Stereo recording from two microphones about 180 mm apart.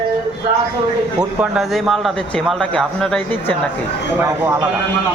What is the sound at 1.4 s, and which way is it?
A man's voice, 5° right (ahead or behind).